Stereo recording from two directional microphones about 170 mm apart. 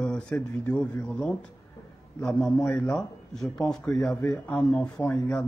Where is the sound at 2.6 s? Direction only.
5° left (ahead or behind).